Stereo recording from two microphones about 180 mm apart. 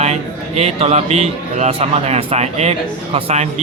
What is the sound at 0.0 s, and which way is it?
A man's voice, 35° right (ahead or behind).